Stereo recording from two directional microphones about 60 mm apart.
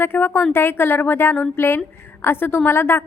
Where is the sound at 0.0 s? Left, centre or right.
Left.